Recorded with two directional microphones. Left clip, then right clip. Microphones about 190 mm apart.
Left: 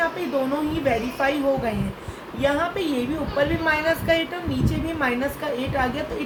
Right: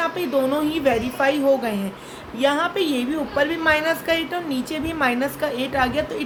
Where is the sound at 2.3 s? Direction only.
45° right (ahead or behind).